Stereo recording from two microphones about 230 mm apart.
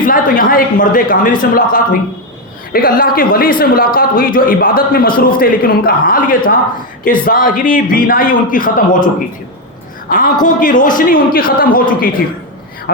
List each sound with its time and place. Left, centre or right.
0.0 s a man's voice: left
2.7 s a man's voice: left
10.1 s a man's voice: left